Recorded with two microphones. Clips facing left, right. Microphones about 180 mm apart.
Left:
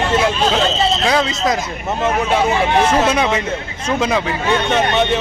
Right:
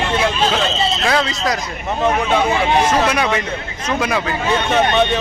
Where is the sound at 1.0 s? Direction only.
20° left (ahead or behind).